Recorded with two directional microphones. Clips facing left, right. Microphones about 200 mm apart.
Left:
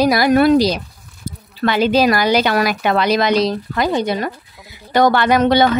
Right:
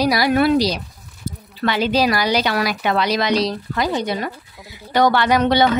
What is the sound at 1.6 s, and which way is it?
A woman's voice, 50° left (ahead or behind).